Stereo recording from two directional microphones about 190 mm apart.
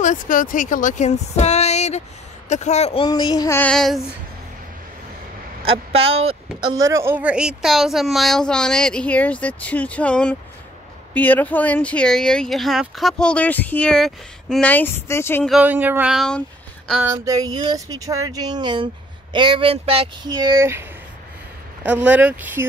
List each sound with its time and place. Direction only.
0.0 s speech: 45° left (ahead or behind)
3.1 s speech: 20° left (ahead or behind); by 4.0 s centre (ahead or behind)
5.6 s speech: 30° right (ahead or behind)
6.6 s speech: 15° right (ahead or behind); by 15.4 s 15° left (ahead or behind)
15.4 s speech: 5° right (ahead or behind)
17.0 s speech: 20° right (ahead or behind)
21.8 s speech: 5° right (ahead or behind)